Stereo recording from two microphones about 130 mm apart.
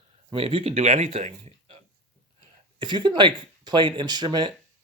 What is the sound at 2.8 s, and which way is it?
Speech, 35° right (ahead or behind).